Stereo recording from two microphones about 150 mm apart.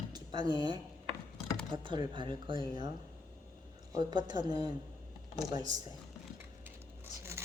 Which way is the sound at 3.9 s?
30° right (ahead or behind).